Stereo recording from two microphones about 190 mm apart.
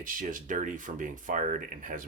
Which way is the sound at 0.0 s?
45° right (ahead or behind).